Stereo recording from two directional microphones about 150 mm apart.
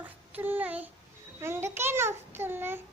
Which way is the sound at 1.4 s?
15° right (ahead or behind).